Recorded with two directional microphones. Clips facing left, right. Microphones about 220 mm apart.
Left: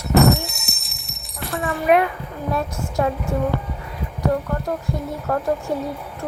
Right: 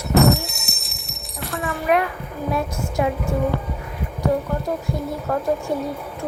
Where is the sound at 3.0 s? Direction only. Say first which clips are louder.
Even; 10° right (ahead or behind).